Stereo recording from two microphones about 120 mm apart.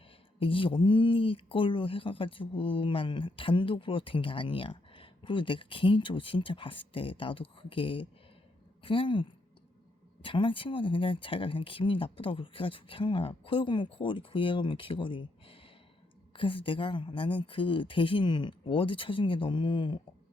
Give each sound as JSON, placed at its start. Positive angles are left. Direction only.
{"t": 0.3, "sound": "speech", "side_deg": 45}
{"t": 10.2, "sound": "speech", "side_deg": 45}